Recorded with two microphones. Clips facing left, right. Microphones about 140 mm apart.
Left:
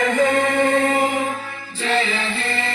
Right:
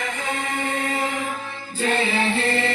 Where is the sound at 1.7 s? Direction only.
50° right (ahead or behind).